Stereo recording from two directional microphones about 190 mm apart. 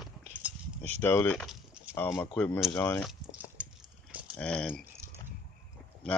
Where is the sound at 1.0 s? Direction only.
10° left (ahead or behind).